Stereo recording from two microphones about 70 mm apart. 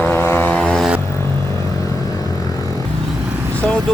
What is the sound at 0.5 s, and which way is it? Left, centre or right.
Vehicle, centre.